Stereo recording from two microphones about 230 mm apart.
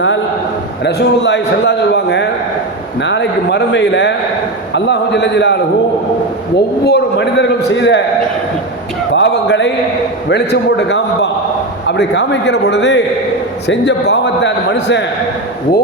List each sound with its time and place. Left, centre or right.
0.9 s a man's voice: left
6.8 s a man's voice: left
9.1 s a sound: left
10.2 s a man's voice: left